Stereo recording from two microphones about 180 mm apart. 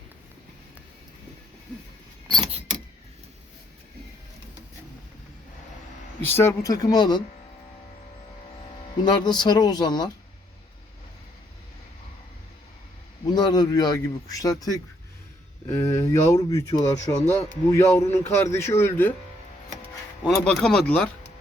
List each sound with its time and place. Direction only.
2.2 s keys jangling: 25° right (ahead or behind)
6.2 s speech: 15° left (ahead or behind)
9.0 s speech: 25° left (ahead or behind)
13.3 s a man's voice: 25° left (ahead or behind)
20.2 s speech: centre (ahead or behind)